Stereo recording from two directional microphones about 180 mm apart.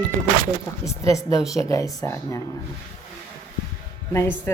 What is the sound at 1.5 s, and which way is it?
Speech, 20° left (ahead or behind).